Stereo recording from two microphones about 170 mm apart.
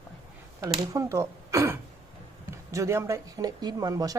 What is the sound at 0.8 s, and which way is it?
Speech, 20° right (ahead or behind).